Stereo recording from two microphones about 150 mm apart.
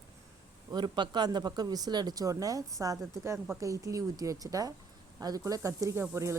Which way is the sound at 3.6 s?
20° right (ahead or behind).